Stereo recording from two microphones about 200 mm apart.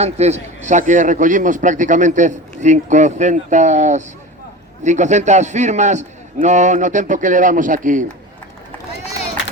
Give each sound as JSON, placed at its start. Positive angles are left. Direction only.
{"t": 0.0, "sound": "a man's voice", "side_deg": -35}